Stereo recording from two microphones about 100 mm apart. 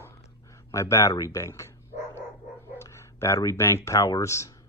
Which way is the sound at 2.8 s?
30° left (ahead or behind).